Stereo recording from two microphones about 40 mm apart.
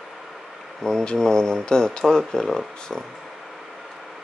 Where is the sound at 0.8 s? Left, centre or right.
Centre.